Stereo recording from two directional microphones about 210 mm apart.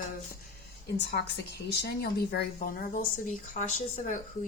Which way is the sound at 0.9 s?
55° left (ahead or behind).